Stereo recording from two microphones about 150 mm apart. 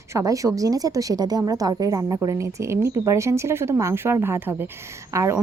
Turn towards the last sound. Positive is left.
turn(degrees=-20)  # may be behind; listen again after turning